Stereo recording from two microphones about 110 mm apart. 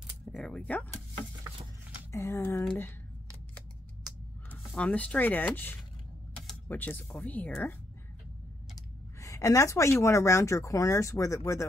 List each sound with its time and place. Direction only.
0.2 s a sound: 5° left (ahead or behind)
2.1 s speech: 25° left (ahead or behind)
2.6 s speech: 10° left (ahead or behind)
4.7 s speech: 10° left (ahead or behind)
8.7 s speech: 30° left (ahead or behind)